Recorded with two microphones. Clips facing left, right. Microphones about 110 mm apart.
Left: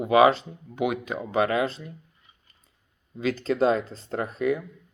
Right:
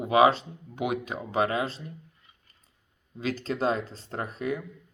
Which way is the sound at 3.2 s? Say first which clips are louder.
Left 5 dB; 40° right (ahead or behind).